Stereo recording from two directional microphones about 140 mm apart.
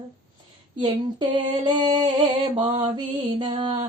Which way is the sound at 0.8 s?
30° right (ahead or behind).